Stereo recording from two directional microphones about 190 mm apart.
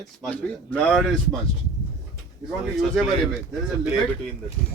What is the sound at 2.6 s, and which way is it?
Speech, centre (ahead or behind).